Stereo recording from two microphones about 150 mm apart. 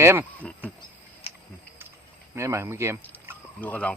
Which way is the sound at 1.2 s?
40° left (ahead or behind).